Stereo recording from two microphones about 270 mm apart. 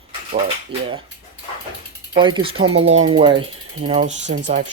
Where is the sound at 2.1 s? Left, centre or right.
Centre.